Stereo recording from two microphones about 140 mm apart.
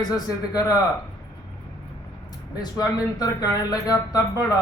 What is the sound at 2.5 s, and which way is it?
Speech, 25° left (ahead or behind).